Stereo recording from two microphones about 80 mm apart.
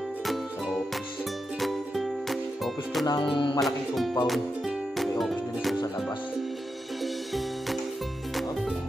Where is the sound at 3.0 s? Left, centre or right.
Left.